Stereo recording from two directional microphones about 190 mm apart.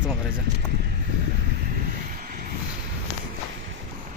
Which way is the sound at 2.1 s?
45° right (ahead or behind).